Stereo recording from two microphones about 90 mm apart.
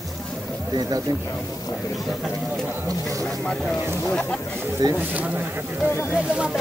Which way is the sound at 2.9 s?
40° right (ahead or behind).